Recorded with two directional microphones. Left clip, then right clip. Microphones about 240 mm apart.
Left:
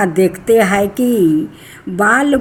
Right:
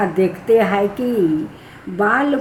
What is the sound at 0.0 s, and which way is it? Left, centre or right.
Speech, left.